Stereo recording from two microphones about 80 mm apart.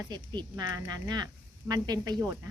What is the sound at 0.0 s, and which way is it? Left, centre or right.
A woman's voice, right.